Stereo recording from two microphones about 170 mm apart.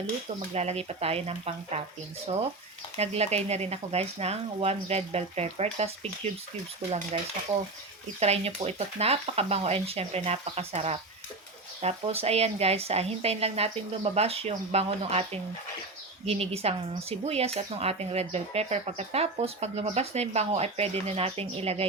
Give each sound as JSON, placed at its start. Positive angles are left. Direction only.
{"t": 0.5, "sound": "speech", "side_deg": -40}
{"t": 8.2, "sound": "speech", "side_deg": -40}